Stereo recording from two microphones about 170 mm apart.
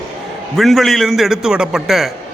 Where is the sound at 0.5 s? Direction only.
Centre (ahead or behind).